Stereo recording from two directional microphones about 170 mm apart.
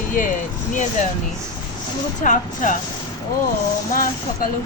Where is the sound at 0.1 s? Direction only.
50° left (ahead or behind).